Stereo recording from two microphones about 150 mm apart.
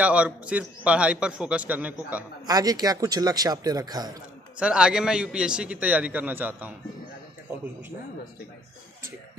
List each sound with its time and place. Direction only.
0.0 s a man's voice: 10° right (ahead or behind)
2.4 s a man's voice: 25° right (ahead or behind)
4.6 s a man's voice: 5° right (ahead or behind)